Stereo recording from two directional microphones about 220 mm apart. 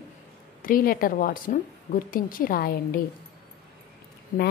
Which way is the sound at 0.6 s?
40° left (ahead or behind).